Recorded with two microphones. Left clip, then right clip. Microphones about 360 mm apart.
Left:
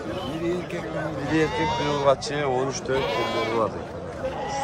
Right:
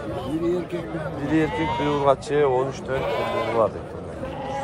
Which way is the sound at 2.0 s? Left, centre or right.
Centre.